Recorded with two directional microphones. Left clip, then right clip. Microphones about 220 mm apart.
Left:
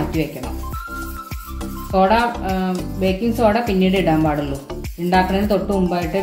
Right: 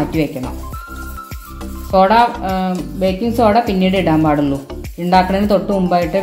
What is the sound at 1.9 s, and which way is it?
A woman's voice, 30° right (ahead or behind).